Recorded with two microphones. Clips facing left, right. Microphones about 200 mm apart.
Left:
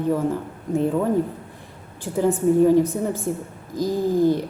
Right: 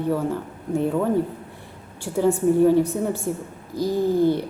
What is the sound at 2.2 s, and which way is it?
Speech, centre (ahead or behind).